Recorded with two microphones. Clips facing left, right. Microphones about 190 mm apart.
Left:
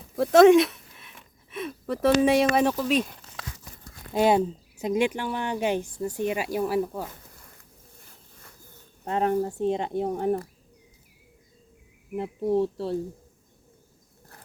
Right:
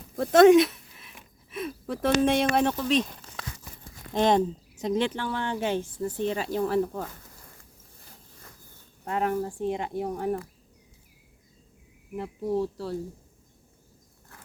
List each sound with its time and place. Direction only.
0.2 s speech: centre (ahead or behind)
4.1 s speech: 10° left (ahead or behind)
9.0 s speech: 25° left (ahead or behind)
12.1 s speech: 25° left (ahead or behind)